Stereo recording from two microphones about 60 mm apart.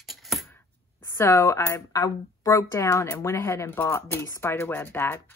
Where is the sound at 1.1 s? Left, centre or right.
Left.